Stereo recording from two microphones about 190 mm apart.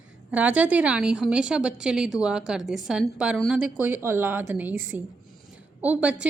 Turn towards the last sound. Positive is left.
turn(degrees=-5)  # may be behind; listen again after turning